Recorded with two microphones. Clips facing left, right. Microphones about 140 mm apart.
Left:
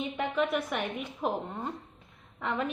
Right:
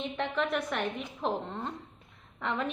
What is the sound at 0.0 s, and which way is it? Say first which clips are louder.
A woman's voice: left 2 dB; 5° left (ahead or behind).